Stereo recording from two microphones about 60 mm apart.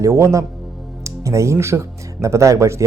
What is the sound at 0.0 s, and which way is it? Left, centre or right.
Speech, right.